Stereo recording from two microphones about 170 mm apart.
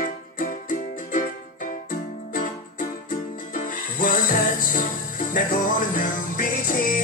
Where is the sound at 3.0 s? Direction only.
55° left (ahead or behind).